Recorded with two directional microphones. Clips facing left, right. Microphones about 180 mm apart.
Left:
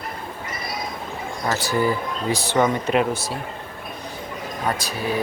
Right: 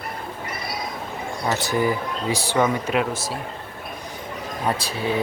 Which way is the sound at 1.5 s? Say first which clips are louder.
Even; 20° right (ahead or behind).